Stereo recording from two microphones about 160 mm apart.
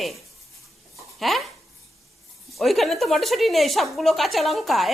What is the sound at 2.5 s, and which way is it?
A woman's voice, centre (ahead or behind).